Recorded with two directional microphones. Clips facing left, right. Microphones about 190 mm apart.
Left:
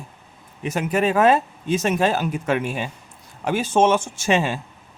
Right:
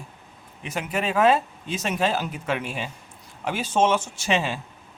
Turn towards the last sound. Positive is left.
turn(degrees=45)  # may be behind; listen again after turning